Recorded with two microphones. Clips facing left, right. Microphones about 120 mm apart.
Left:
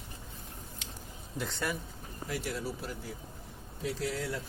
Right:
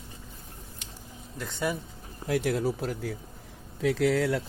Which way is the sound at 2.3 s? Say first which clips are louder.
Right 10 dB; 55° right (ahead or behind).